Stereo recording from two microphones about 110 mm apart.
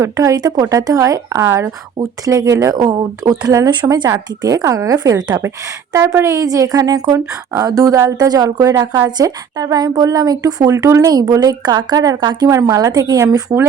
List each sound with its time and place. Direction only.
0.0 s speech: 30° right (ahead or behind)
3.8 s speech: 45° right (ahead or behind)
4.1 s speech: 30° right (ahead or behind)